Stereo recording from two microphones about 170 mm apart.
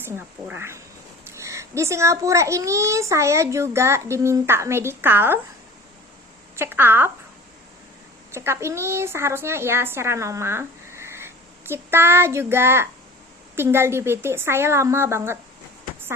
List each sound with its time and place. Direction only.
0.0 s a child's voice: 10° right (ahead or behind)
6.6 s a child's voice: 10° right (ahead or behind)
8.3 s a woman's voice: 15° right (ahead or behind)